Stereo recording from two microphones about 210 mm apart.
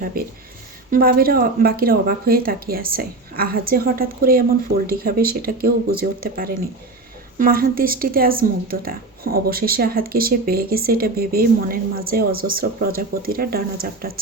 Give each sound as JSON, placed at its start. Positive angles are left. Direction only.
{"t": 0.0, "sound": "speech", "side_deg": -45}